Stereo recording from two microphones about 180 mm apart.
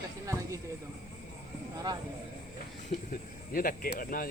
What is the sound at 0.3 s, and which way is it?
Speech, 15° right (ahead or behind).